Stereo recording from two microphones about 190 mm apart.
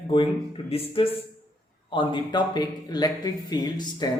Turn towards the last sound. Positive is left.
turn(degrees=20)  # may be behind; listen again after turning